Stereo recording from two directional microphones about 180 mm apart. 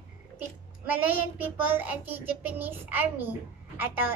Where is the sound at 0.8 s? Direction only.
10° right (ahead or behind).